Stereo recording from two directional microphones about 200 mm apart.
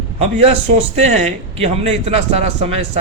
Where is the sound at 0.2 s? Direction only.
30° right (ahead or behind).